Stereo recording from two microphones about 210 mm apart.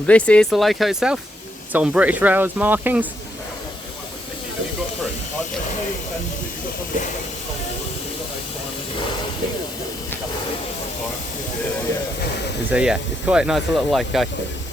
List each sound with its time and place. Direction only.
0.1 s speech: 5° left (ahead or behind)
12.7 s speech: 5° right (ahead or behind)